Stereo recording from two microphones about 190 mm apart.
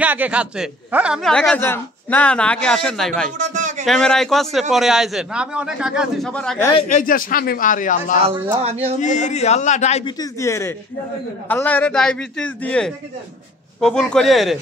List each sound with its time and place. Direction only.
0.0 s a man's voice: 10° right (ahead or behind)
3.3 s a sound: 40° right (ahead or behind)
3.8 s a man's voice: 5° left (ahead or behind)
6.9 s speech: 45° left (ahead or behind)
8.5 s speech: 35° right (ahead or behind)
9.0 s a man's voice: 40° left (ahead or behind)
10.0 s a man's voice: 20° left (ahead or behind); by 14.6 s centre (ahead or behind)